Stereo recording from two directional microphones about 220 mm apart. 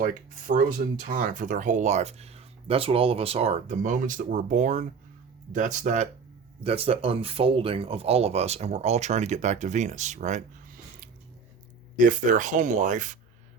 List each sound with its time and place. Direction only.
0.0 s speech: 40° right (ahead or behind)
11.9 s speech: 35° right (ahead or behind)